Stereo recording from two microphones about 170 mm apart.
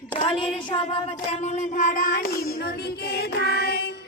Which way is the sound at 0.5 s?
35° left (ahead or behind).